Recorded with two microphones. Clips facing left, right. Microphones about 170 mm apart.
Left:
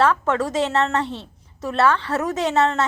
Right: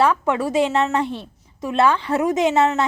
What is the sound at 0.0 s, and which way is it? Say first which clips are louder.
A woman's voice: right 1 dB; 10° right (ahead or behind).